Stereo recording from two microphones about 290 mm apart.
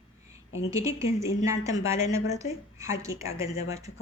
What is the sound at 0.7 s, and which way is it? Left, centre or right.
Speech, centre.